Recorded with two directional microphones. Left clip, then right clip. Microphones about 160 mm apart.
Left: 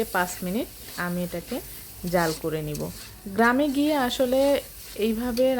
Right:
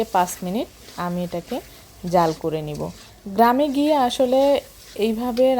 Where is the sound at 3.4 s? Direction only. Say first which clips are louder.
Right 5 dB; 15° right (ahead or behind).